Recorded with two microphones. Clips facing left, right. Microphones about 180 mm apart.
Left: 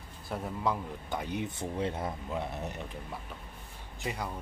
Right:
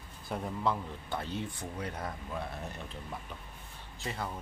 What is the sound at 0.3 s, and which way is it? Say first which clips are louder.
A man's voice: even; 5° left (ahead or behind).